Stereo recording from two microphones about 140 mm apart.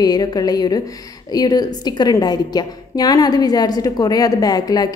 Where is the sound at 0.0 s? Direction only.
30° left (ahead or behind).